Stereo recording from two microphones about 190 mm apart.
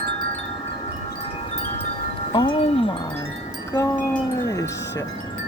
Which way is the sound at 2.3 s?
25° left (ahead or behind).